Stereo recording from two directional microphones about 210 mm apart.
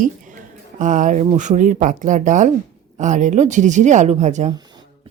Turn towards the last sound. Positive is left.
turn(degrees=-35)  # may be behind; listen again after turning